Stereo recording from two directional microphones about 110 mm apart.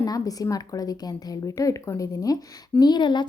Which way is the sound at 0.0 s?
35° left (ahead or behind).